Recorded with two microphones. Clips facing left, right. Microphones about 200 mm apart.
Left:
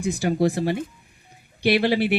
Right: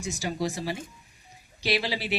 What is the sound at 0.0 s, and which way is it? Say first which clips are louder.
Speech: left 9 dB; 55° left (ahead or behind).